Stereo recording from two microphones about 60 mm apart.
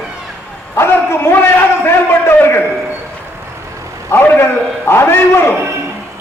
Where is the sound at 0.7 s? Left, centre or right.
Left.